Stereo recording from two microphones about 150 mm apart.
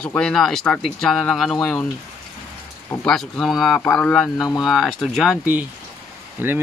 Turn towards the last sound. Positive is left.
turn(degrees=-15)  # may be behind; listen again after turning